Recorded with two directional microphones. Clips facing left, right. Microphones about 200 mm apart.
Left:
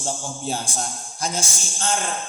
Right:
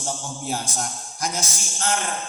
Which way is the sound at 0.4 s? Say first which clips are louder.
Even; 30° left (ahead or behind).